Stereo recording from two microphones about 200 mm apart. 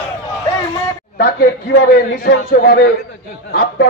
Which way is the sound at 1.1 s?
50° left (ahead or behind).